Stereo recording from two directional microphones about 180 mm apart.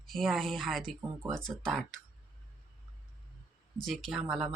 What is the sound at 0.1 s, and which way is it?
Speech, centre (ahead or behind).